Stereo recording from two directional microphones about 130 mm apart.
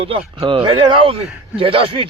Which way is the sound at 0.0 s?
45° right (ahead or behind).